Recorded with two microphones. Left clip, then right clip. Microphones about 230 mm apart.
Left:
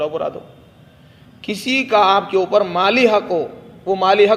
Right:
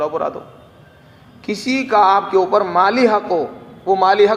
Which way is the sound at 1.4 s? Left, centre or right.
Left.